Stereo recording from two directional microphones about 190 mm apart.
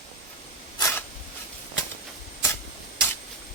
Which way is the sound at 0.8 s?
15° left (ahead or behind).